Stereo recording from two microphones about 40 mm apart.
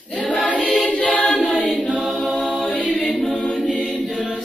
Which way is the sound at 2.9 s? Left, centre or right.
Centre.